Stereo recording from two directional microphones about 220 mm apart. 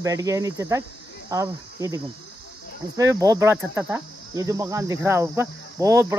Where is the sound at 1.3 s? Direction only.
15° right (ahead or behind).